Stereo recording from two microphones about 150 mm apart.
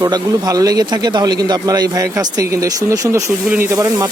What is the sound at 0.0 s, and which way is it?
Speech, 25° right (ahead or behind).